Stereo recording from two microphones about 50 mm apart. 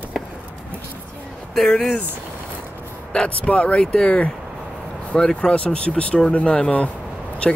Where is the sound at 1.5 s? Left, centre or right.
Centre.